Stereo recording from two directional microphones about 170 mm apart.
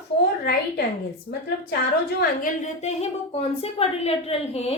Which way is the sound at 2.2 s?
50° left (ahead or behind).